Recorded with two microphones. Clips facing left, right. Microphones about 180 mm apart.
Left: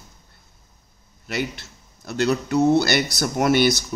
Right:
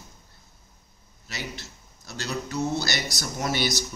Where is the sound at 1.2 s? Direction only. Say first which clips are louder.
Left 10 dB; 55° left (ahead or behind).